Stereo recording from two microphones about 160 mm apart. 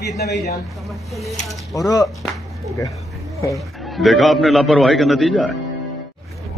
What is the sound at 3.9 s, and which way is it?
A man's voice, centre (ahead or behind).